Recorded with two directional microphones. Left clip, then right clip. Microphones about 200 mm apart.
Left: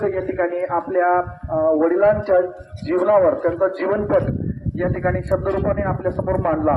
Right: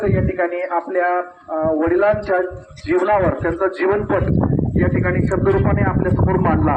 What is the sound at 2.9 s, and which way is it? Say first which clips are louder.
A man's voice: left 1 dB; 45° left (ahead or behind).